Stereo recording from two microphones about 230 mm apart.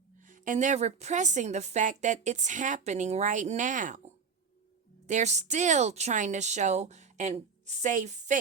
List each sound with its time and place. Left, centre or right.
0.3 s a woman's voice: right
5.0 s a woman's voice: right